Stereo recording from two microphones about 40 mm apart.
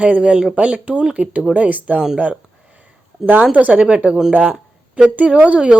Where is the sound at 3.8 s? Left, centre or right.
Right.